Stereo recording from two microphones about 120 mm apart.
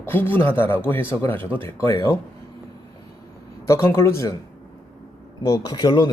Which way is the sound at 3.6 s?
25° left (ahead or behind).